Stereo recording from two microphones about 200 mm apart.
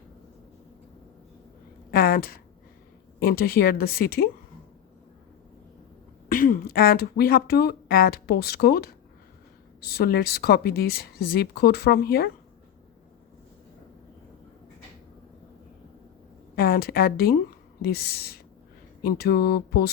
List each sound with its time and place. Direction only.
1.9 s a sound: 45° left (ahead or behind)
3.2 s speech: 50° left (ahead or behind)
6.2 s speech: 45° left (ahead or behind)
16.6 s a woman's voice: 50° left (ahead or behind)